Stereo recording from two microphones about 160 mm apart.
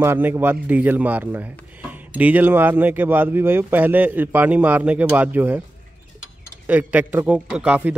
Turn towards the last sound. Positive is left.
turn(degrees=-10)  # may be behind; listen again after turning